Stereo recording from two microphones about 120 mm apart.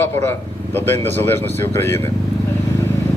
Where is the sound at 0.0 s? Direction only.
20° left (ahead or behind).